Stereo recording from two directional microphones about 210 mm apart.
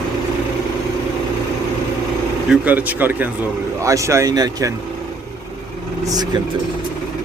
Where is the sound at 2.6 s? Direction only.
10° right (ahead or behind).